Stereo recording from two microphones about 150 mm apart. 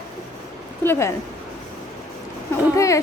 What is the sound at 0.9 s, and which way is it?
Speech, 20° left (ahead or behind).